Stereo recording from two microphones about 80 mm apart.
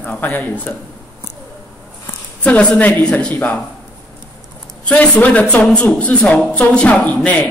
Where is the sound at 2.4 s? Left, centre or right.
Centre.